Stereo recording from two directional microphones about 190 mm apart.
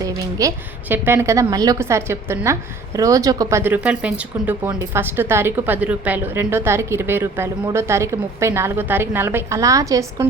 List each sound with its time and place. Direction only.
0.0 s a woman's voice: 20° right (ahead or behind)